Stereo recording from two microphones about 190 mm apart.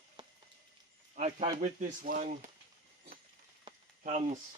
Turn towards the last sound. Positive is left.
turn(degrees=-40)  # may be behind; listen again after turning